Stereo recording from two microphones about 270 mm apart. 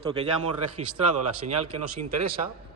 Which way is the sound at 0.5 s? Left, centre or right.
Right.